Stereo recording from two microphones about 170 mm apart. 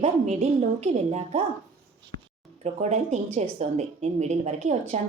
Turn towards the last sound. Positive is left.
turn(degrees=-40)  # may be behind; listen again after turning